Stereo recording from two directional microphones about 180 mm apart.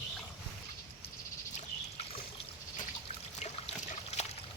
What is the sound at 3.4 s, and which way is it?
Trickle, 35° left (ahead or behind).